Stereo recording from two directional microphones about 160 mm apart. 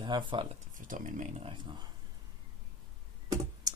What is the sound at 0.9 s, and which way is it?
Speech, 50° right (ahead or behind).